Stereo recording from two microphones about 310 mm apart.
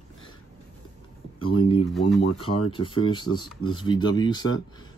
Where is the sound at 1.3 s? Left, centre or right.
Centre.